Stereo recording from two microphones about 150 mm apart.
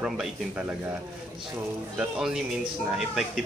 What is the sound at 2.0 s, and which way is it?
Speech, 5° right (ahead or behind).